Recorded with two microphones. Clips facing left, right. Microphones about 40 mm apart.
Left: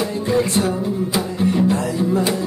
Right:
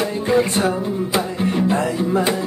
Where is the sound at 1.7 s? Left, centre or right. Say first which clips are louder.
Right 1 dB; right.